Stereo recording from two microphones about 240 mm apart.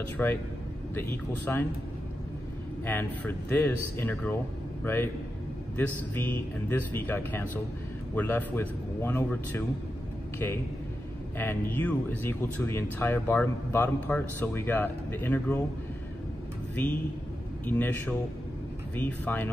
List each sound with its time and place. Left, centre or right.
0.2 s speech: centre
2.8 s speech: centre
11.3 s speech: centre
16.8 s speech: centre